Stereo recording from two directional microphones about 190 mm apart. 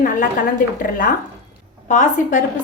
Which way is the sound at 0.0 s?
45° left (ahead or behind).